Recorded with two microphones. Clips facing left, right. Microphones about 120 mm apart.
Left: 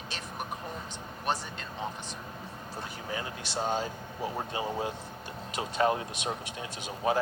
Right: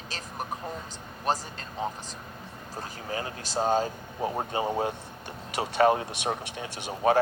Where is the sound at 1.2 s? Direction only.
40° right (ahead or behind).